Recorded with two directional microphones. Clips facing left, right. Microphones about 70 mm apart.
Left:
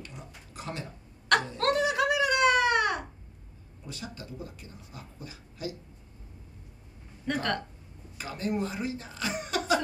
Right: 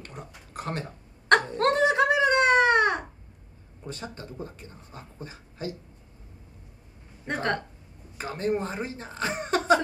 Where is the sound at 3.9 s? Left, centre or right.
Right.